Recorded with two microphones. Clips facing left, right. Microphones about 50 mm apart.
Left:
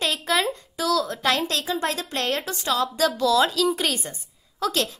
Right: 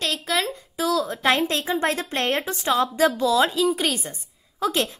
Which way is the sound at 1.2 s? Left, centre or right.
Right.